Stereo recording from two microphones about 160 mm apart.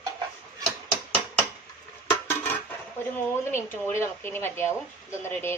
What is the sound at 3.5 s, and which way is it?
A woman's voice, 15° left (ahead or behind).